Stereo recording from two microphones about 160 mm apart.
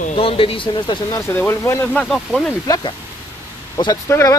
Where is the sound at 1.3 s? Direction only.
15° left (ahead or behind).